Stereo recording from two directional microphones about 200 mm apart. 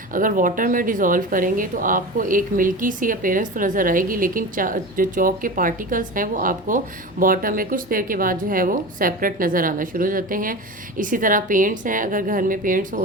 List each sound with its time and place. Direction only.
0.1 s speech: 45° right (ahead or behind)